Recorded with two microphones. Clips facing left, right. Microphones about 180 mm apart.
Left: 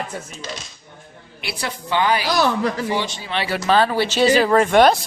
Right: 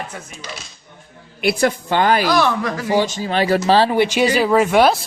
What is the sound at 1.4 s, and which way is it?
Speech, 50° right (ahead or behind).